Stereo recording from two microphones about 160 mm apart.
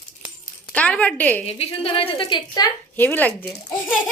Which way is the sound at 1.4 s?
35° left (ahead or behind).